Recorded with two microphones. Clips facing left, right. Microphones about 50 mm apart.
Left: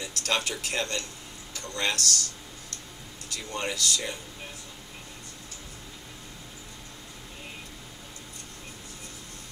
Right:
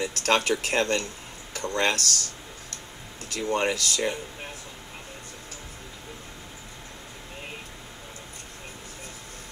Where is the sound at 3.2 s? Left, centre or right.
Right.